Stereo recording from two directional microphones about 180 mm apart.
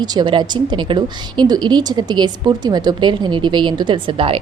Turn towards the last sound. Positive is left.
turn(degrees=-30)  # may be behind; listen again after turning